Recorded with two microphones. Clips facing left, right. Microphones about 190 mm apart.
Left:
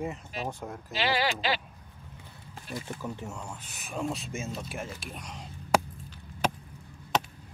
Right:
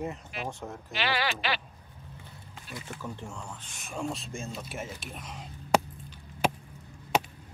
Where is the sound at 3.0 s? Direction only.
10° left (ahead or behind).